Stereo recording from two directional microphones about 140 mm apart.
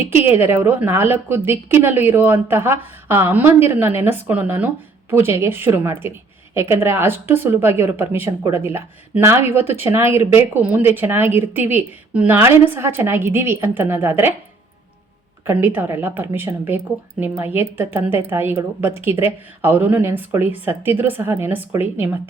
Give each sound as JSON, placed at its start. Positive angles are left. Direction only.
{"t": 0.1, "sound": "speech", "side_deg": -15}
{"t": 15.4, "sound": "speech", "side_deg": -15}